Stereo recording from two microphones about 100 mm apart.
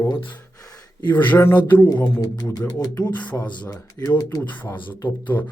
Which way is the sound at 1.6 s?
50° left (ahead or behind).